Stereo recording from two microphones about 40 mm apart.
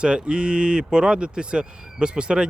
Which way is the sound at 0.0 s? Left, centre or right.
Right.